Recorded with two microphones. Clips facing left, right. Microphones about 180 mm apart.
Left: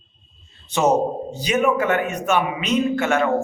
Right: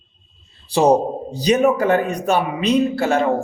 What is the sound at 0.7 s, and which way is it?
A man's voice, 35° right (ahead or behind).